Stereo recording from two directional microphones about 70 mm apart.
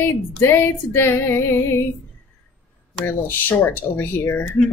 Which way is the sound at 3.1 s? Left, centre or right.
Left.